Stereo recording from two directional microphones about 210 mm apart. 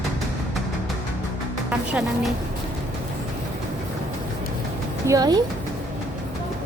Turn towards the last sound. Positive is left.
turn(degrees=-20)  # may be behind; listen again after turning